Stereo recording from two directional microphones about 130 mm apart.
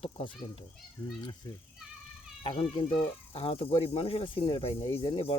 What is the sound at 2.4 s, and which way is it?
Speech, 40° left (ahead or behind).